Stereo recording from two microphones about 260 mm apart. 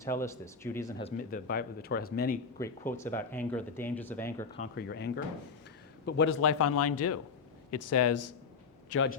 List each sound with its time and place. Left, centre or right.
0.0 s speech: centre
1.0 s speech: left
2.6 s speech: centre
4.7 s a man's voice: left
8.9 s a man's voice: left